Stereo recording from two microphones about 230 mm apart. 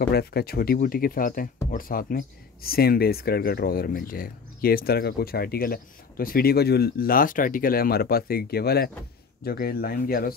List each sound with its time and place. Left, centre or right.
0.1 s speech: left